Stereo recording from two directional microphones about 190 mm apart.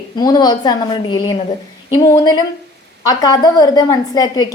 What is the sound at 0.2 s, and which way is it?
A woman's voice, 20° left (ahead or behind).